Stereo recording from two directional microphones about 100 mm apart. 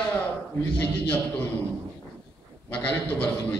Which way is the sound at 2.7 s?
15° left (ahead or behind).